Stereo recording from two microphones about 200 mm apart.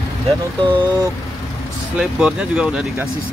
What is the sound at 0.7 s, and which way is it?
Speech, 25° right (ahead or behind).